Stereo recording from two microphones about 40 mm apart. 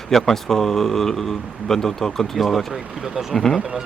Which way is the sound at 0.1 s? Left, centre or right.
Centre.